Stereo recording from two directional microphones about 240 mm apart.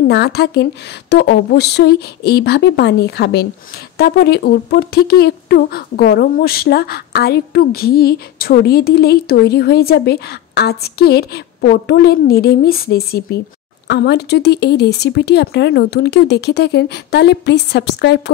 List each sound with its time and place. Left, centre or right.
0.1 s speech: left